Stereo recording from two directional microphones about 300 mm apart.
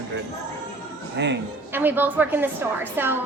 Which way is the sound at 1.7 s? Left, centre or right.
Centre.